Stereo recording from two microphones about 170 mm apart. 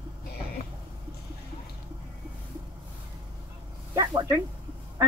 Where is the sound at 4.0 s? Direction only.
15° right (ahead or behind).